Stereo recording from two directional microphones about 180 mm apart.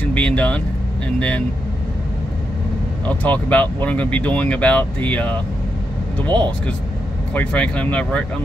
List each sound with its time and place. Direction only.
0.0 s speech: 5° left (ahead or behind)
3.1 s speech: 10° left (ahead or behind)
6.2 s speech: 25° right (ahead or behind)
7.3 s speech: 5° left (ahead or behind)